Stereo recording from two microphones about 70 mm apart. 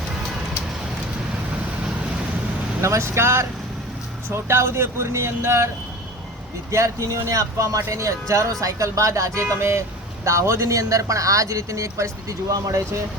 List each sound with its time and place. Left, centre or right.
2.8 s speech: right
4.4 s speech: right
6.7 s a man's voice: right